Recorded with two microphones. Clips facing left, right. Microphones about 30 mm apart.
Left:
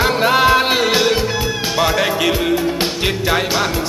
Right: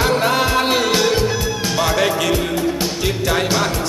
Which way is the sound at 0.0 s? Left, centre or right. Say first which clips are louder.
Left 3 dB; centre.